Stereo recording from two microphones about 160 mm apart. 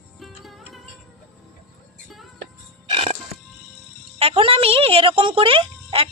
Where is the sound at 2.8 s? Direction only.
40° right (ahead or behind).